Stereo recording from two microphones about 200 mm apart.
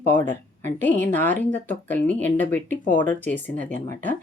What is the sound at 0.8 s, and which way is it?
Speech, 10° left (ahead or behind).